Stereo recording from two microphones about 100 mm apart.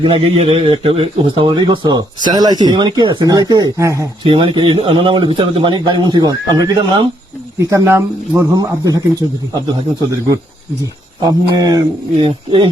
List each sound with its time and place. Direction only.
0.0 s speech: 70° right (ahead or behind)
1.5 s speech: 45° right (ahead or behind); by 4.1 s 30° right (ahead or behind)
4.2 s a man's voice: 60° right (ahead or behind)
7.6 s speech: 30° right (ahead or behind)
10.1 s speech: 35° right (ahead or behind)
12.2 s a man's voice: 55° right (ahead or behind)